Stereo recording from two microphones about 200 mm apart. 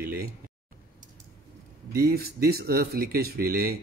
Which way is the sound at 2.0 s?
50° right (ahead or behind).